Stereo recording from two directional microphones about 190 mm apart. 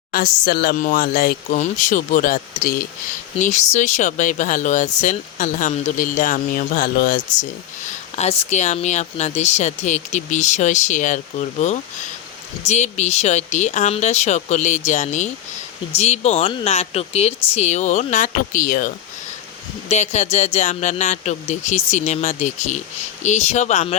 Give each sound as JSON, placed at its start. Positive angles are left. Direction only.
{"t": 0.1, "sound": "speech", "side_deg": 50}
{"t": 7.9, "sound": "speech", "side_deg": 35}
{"t": 19.9, "sound": "speech", "side_deg": 35}